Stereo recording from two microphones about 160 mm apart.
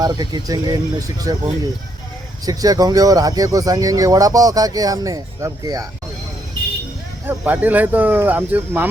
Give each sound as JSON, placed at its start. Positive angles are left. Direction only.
{"t": 0.0, "sound": "speech", "side_deg": -25}
{"t": 2.5, "sound": "speech", "side_deg": -25}
{"t": 7.3, "sound": "speech", "side_deg": -10}